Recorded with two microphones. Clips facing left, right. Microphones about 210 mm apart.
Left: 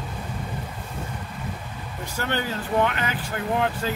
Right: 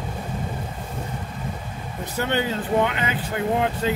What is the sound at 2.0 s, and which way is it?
Speech, 20° right (ahead or behind).